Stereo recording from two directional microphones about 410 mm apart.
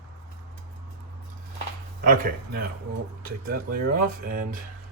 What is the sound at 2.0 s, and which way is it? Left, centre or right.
Speech, right.